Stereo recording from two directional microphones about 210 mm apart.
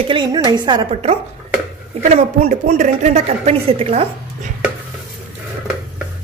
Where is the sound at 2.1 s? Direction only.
30° right (ahead or behind).